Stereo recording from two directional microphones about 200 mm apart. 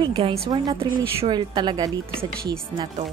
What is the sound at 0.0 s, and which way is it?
Speech, 30° right (ahead or behind).